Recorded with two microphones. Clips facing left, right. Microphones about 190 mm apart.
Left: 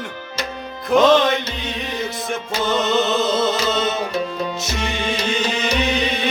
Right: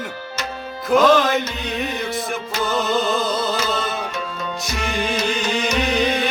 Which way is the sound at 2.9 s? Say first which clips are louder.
Left 2 dB; 25° left (ahead or behind).